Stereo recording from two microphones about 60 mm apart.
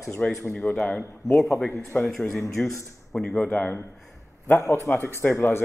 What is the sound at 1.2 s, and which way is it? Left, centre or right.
Speech, centre.